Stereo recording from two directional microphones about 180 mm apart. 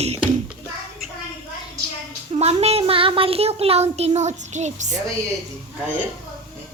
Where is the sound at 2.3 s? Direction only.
35° right (ahead or behind).